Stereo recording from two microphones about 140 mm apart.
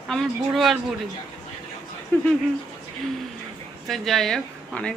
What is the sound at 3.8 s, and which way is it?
A woman's voice, centre (ahead or behind).